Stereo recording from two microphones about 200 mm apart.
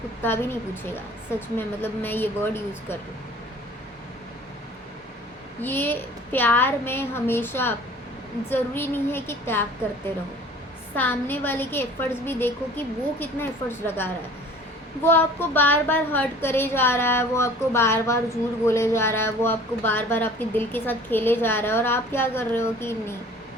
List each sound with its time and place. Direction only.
0.2 s a woman's voice: 10° left (ahead or behind)
5.6 s a woman's voice: 10° left (ahead or behind)
10.9 s a woman's voice: 10° left (ahead or behind)